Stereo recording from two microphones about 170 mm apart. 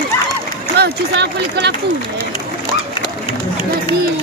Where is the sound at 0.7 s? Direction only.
75° right (ahead or behind).